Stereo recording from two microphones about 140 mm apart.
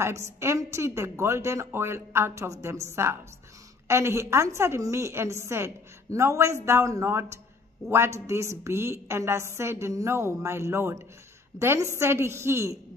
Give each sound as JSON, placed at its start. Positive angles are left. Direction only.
{"t": 0.0, "sound": "a woman's voice", "side_deg": -20}